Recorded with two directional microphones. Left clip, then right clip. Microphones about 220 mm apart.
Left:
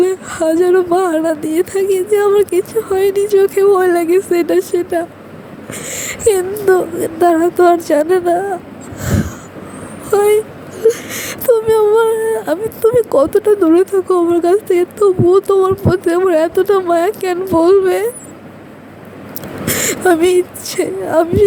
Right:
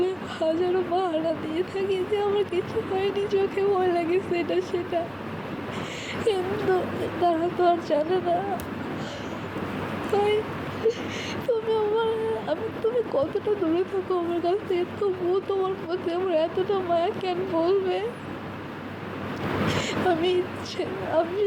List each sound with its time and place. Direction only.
0.0 s speech: 55° left (ahead or behind)
6.0 s speech: 55° left (ahead or behind)
10.1 s speech: 55° left (ahead or behind)
19.6 s a woman's voice: 55° left (ahead or behind)